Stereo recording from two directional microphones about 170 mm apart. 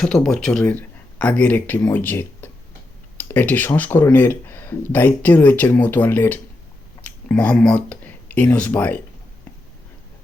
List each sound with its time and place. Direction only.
0.0 s speech: 5° left (ahead or behind)